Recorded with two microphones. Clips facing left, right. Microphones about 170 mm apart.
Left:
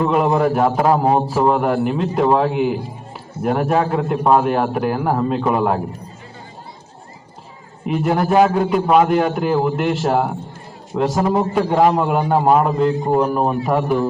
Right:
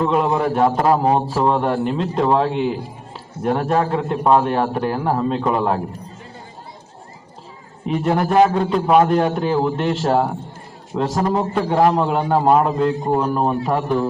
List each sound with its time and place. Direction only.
0.0 s a man's voice: 15° left (ahead or behind)
7.9 s a man's voice: 10° left (ahead or behind)